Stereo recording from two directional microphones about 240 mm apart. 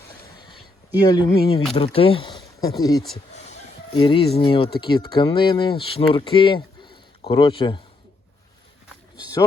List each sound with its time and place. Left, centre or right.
0.9 s speech: centre